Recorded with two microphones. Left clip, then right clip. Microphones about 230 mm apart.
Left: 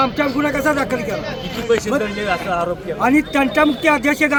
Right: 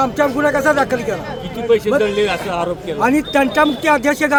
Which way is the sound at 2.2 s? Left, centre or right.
Right.